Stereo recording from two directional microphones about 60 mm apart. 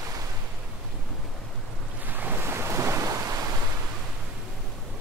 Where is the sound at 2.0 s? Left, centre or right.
Right.